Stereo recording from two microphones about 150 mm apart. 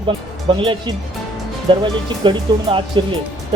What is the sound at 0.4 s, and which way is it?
Speech, 35° right (ahead or behind).